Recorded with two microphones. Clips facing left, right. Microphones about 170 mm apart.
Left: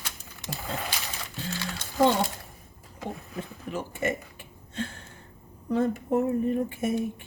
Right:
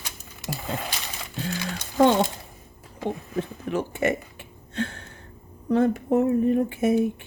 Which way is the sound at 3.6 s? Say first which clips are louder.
Right 5 dB; 70° right (ahead or behind).